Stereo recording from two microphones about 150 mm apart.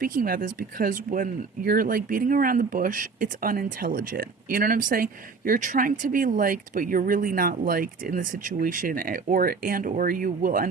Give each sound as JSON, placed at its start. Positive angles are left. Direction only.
{"t": 0.0, "sound": "speech", "side_deg": -70}